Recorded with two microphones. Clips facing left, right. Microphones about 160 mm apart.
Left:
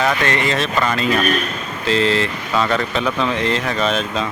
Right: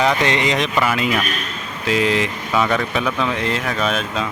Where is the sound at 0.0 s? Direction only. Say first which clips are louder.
Right 1 dB; 20° right (ahead or behind).